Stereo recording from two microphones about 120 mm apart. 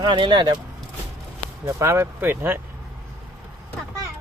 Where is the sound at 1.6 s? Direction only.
20° right (ahead or behind).